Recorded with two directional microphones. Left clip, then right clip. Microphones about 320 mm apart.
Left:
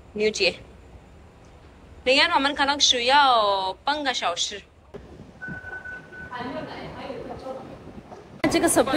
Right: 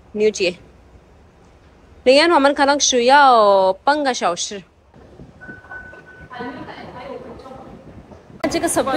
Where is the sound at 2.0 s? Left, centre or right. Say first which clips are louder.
Right 7 dB; centre.